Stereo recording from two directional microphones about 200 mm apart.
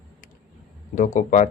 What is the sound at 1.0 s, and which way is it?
Speech, 40° left (ahead or behind).